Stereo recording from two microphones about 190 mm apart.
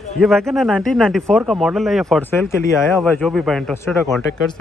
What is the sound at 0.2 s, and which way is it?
Speech, centre (ahead or behind).